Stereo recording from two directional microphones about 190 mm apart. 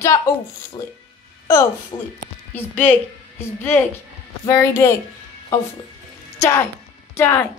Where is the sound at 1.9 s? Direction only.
25° left (ahead or behind).